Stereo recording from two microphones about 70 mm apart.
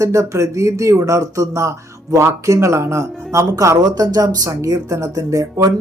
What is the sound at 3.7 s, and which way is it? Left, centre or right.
Speech, right.